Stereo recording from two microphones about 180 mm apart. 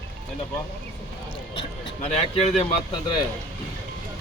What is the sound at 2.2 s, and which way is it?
Speech, 30° left (ahead or behind).